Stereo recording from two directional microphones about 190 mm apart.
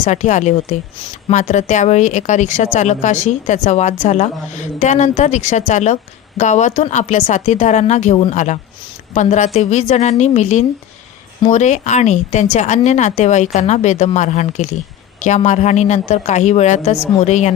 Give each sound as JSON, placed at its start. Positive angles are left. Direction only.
{"t": 0.0, "sound": "a woman's voice", "side_deg": 40}